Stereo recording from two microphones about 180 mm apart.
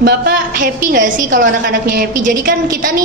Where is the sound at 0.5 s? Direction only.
45° right (ahead or behind).